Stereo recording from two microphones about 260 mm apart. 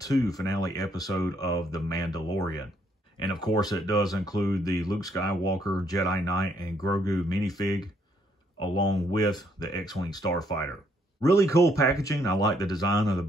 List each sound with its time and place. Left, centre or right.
0.3 s speech: centre